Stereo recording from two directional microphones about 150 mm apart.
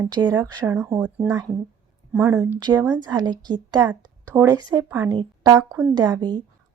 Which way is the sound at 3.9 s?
15° right (ahead or behind).